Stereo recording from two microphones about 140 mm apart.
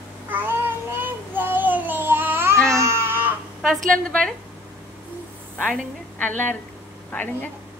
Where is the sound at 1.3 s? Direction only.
15° right (ahead or behind).